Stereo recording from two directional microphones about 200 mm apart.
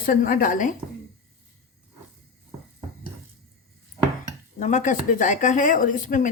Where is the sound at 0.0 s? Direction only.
45° left (ahead or behind).